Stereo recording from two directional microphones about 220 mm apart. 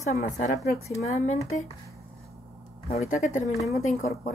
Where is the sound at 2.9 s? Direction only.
35° left (ahead or behind).